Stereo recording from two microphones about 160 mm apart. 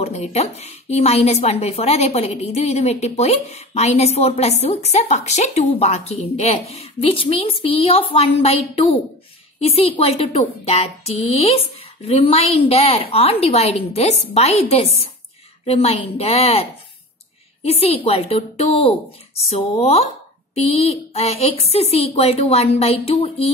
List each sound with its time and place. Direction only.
0.0 s speech: 45° left (ahead or behind)
17.6 s speech: 40° left (ahead or behind)